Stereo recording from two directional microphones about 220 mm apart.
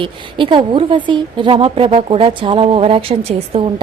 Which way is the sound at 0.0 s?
20° right (ahead or behind).